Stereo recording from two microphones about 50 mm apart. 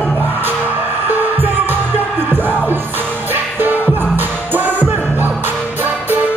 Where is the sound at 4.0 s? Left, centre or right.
Right.